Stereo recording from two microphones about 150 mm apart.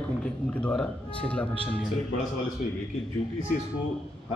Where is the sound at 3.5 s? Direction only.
65° left (ahead or behind).